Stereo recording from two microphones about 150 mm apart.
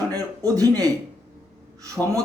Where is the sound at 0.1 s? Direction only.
25° right (ahead or behind).